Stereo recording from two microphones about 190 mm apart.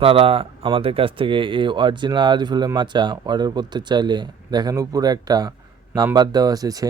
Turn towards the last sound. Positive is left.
turn(degrees=-20)  # may be behind; listen again after turning